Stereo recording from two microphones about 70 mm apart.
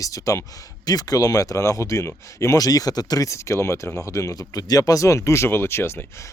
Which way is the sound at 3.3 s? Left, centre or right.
Left.